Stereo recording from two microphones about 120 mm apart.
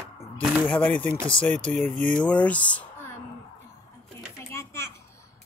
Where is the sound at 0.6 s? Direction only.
10° left (ahead or behind).